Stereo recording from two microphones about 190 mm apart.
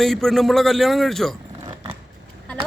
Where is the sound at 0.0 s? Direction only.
Centre (ahead or behind).